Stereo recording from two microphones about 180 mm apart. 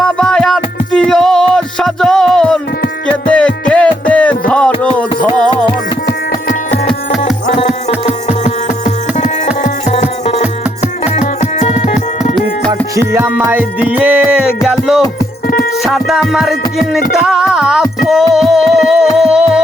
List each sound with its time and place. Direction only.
0.0 s music: 5° left (ahead or behind)
6.8 s music: centre (ahead or behind)
7.5 s music: 35° left (ahead or behind)
13.0 s music: 10° right (ahead or behind)